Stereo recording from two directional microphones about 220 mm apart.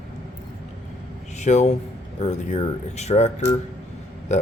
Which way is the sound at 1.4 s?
30° left (ahead or behind).